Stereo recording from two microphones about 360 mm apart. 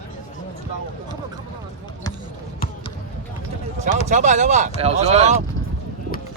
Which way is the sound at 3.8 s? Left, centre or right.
Centre.